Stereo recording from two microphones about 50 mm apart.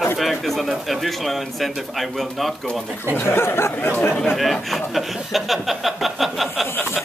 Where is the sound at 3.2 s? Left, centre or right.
Left.